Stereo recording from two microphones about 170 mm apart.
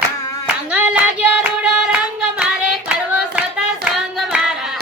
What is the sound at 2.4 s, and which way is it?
Hands, 5° right (ahead or behind).